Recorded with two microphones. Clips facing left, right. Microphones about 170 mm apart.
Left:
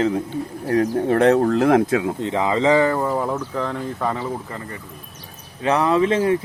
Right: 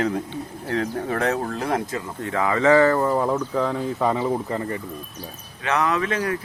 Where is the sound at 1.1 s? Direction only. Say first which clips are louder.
Left 11 dB; 60° left (ahead or behind).